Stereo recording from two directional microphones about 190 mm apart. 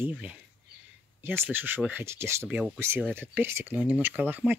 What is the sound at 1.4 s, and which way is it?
Speech, 10° right (ahead or behind).